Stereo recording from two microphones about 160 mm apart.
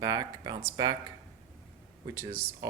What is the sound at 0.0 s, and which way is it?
Speech, 20° right (ahead or behind).